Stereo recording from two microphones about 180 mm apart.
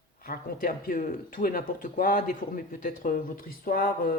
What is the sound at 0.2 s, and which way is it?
Speech, 55° left (ahead or behind).